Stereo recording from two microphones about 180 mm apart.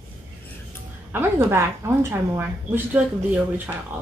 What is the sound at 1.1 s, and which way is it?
A woman's voice, 15° right (ahead or behind).